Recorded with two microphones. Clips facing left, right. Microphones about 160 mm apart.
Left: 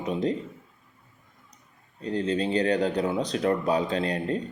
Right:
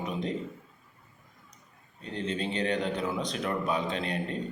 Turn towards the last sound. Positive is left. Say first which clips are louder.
# left 5 dB
turn(degrees=35)  # may be behind; listen again after turning